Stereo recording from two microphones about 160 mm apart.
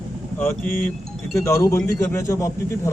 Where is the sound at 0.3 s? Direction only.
10° left (ahead or behind).